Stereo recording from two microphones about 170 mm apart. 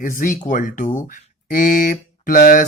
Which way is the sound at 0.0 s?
50° left (ahead or behind).